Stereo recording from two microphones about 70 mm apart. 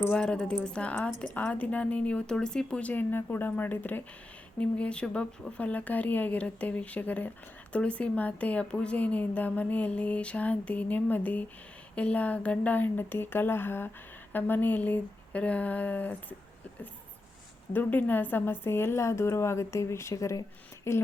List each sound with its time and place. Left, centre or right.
0.1 s a woman's voice: centre
17.7 s a woman's voice: left